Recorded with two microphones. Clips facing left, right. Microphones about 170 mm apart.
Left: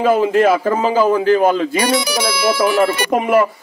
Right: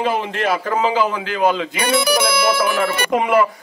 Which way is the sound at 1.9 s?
55° right (ahead or behind).